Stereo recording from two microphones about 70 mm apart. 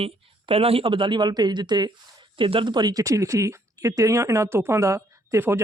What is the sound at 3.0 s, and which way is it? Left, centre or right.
A woman's voice, right.